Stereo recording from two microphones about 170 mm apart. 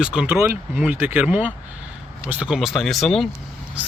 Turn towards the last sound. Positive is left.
turn(degrees=0)  # may be behind; listen again after turning